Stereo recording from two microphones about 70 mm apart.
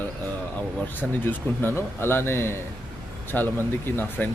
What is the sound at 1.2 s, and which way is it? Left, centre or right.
Speech, left.